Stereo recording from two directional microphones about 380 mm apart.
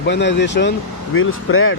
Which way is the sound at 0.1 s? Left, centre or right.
Left.